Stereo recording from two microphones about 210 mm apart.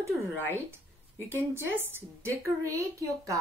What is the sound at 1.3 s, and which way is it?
A woman's voice, 10° right (ahead or behind).